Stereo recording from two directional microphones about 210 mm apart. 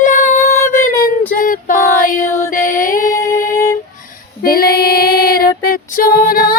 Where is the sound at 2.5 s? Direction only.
40° left (ahead or behind).